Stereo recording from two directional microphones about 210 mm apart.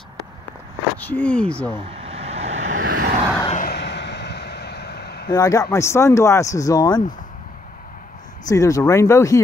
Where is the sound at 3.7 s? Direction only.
55° left (ahead or behind).